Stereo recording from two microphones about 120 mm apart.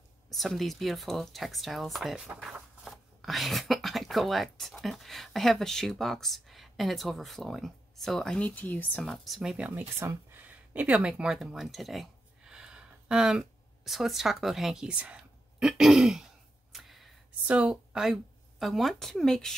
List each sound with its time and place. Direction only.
0.3 s speech: centre (ahead or behind)
2.8 s speech: centre (ahead or behind)
9.7 s speech: 20° right (ahead or behind); by 19.5 s 5° left (ahead or behind)